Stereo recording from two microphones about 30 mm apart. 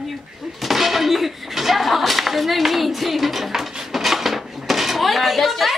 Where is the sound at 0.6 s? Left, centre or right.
Centre.